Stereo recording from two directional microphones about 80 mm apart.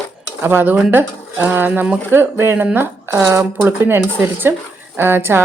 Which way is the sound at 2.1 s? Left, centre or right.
Right.